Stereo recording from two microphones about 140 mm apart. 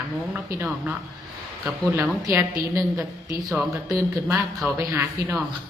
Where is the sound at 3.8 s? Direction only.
20° right (ahead or behind).